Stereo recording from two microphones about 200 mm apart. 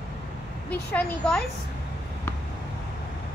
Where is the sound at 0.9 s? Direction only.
5° left (ahead or behind).